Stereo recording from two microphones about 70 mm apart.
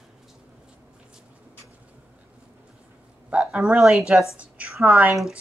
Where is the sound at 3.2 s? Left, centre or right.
Centre.